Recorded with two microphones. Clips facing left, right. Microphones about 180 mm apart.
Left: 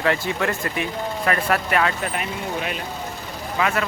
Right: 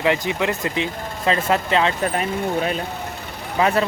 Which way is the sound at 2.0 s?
35° right (ahead or behind).